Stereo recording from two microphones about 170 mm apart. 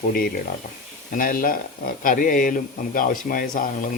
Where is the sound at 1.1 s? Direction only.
55° left (ahead or behind).